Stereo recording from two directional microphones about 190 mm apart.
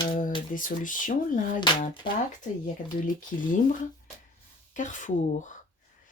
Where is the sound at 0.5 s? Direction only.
45° left (ahead or behind).